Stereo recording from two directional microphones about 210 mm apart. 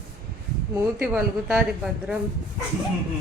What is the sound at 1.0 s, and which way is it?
Speech, 5° right (ahead or behind).